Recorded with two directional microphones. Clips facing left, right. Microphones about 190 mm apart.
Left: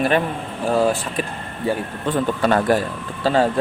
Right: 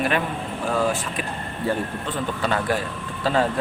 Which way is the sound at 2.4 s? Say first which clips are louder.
Left 6 dB; 45° left (ahead or behind).